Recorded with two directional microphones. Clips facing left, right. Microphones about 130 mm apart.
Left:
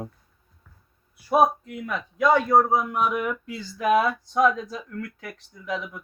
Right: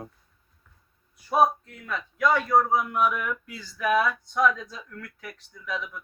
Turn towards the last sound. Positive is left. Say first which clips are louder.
# left 3 dB
turn(degrees=25)  # may be behind; listen again after turning